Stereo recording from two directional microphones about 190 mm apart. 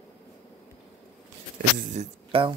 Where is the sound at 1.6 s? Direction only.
45° right (ahead or behind).